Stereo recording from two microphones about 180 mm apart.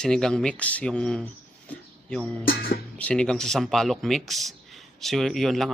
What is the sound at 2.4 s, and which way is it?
Speech, 55° left (ahead or behind).